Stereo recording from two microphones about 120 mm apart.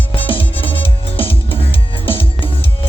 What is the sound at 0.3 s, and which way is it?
Music, 50° left (ahead or behind).